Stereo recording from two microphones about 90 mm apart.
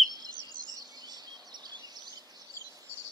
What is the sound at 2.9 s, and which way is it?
Chicken, 25° right (ahead or behind).